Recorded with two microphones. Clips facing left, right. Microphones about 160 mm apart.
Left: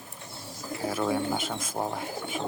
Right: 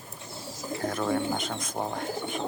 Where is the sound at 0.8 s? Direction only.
5° left (ahead or behind).